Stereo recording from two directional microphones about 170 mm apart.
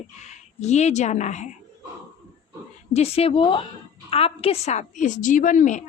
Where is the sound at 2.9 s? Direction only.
35° left (ahead or behind).